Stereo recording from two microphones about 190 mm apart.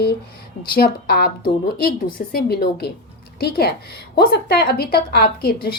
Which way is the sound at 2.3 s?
55° left (ahead or behind).